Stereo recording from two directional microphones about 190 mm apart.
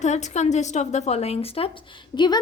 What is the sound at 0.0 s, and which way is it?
A woman's voice, 40° left (ahead or behind).